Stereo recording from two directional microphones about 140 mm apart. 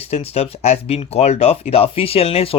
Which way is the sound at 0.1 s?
50° left (ahead or behind).